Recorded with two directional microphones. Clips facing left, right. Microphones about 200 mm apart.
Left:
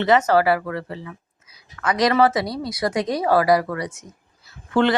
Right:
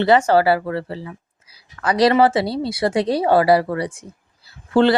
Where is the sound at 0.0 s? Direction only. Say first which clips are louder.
Right 2 dB; 30° right (ahead or behind).